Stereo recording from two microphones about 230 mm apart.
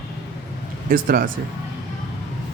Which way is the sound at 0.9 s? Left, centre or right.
Right.